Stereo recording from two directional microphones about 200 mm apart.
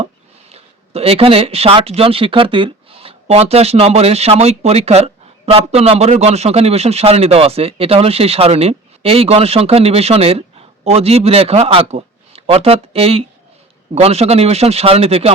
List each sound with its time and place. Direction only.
0.5 s a man's voice: 30° right (ahead or behind)